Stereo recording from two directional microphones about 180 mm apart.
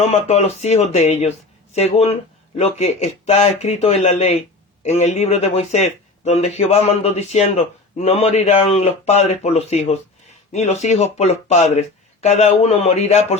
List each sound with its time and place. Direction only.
0.0 s speech: 40° left (ahead or behind)